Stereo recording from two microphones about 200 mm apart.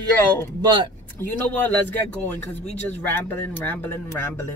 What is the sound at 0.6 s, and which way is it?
Speech, 20° right (ahead or behind).